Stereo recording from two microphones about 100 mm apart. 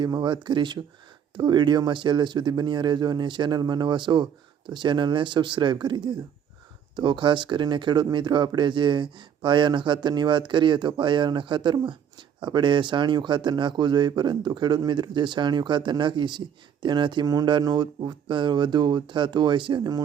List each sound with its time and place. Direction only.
0.0 s speech: 50° right (ahead or behind)